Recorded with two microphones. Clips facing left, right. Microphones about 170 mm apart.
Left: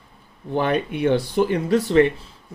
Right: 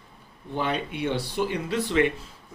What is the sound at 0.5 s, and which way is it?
Speech, 55° left (ahead or behind).